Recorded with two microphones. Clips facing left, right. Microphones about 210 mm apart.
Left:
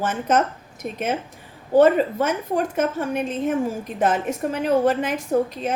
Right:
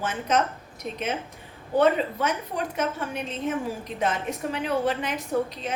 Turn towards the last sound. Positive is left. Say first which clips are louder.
# left 5 dB
turn(degrees=45)  # may be behind; listen again after turning